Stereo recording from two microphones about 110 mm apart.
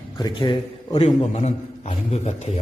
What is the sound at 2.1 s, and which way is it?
Speech, 80° left.